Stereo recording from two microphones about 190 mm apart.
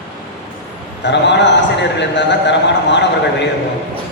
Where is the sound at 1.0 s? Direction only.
65° left (ahead or behind).